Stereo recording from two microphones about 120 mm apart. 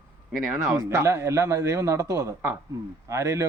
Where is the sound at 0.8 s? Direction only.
25° right (ahead or behind).